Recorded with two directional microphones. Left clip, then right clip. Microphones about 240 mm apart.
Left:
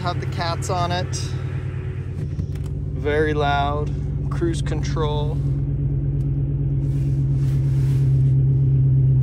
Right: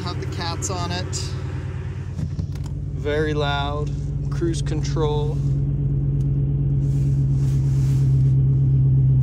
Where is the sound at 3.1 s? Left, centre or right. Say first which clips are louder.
Left 3 dB; centre.